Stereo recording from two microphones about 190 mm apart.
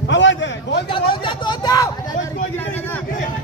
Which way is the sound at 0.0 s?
75° left (ahead or behind).